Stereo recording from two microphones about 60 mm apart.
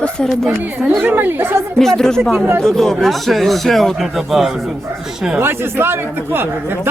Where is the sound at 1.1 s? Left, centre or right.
Right.